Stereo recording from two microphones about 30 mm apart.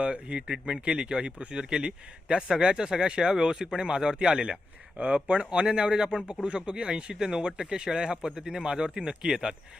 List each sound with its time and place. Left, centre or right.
0.0 s speech: right
0.4 s speech: right
0.9 s speech: right
4.9 s speech: right
5.6 s speech: right
6.5 s speech: right; by 8.6 s centre
8.6 s speech: right